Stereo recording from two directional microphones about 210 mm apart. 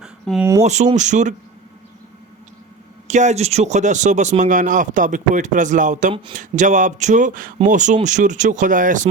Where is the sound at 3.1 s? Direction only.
35° right (ahead or behind).